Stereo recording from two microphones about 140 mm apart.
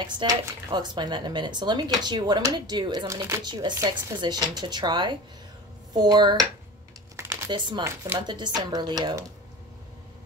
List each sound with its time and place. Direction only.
0.0 s speech: 35° right (ahead or behind)
7.2 s computer keyboard: 20° right (ahead or behind)
7.5 s speech: 35° right (ahead or behind)
7.8 s speech: 20° right (ahead or behind)
8.2 s speech: 30° right (ahead or behind)